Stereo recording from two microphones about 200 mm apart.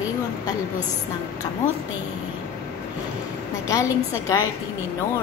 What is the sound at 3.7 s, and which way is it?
Speech, 15° left (ahead or behind).